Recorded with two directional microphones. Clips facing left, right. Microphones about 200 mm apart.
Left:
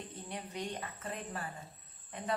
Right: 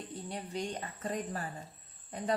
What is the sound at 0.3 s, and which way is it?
A woman's voice, 35° right (ahead or behind).